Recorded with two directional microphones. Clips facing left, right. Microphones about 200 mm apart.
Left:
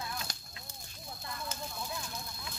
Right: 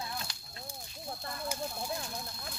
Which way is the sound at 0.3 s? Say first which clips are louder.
Left 3 dB; 45° left (ahead or behind).